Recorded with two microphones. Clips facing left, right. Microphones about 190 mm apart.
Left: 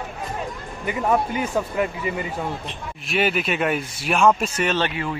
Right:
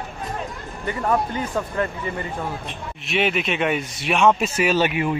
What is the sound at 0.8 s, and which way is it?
Speech, 10° left (ahead or behind).